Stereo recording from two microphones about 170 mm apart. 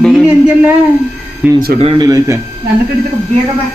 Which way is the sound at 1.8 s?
30° right (ahead or behind).